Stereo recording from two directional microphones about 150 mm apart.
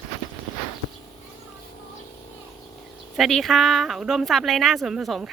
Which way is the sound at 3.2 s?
Centre (ahead or behind).